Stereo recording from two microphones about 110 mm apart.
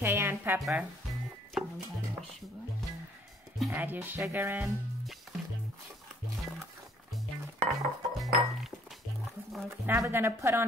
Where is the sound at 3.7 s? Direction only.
15° right (ahead or behind).